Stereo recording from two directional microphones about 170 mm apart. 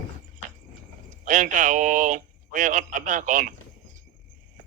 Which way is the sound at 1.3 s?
50° right (ahead or behind).